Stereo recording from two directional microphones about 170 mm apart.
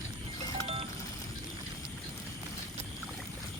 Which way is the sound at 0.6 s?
35° right (ahead or behind).